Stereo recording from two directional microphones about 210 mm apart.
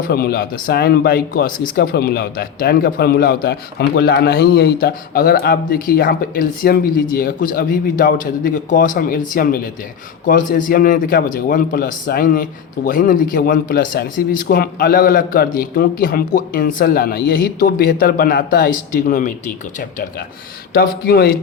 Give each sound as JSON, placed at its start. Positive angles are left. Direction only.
{"t": 0.1, "sound": "a man's voice", "side_deg": 45}